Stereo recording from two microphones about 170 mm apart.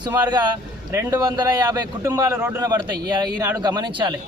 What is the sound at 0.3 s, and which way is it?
Speech, 25° right (ahead or behind).